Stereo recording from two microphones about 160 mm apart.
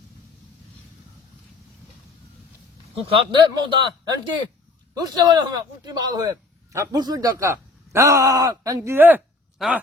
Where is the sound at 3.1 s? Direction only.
30° right (ahead or behind).